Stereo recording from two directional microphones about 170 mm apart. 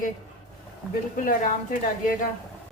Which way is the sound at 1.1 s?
55° left (ahead or behind).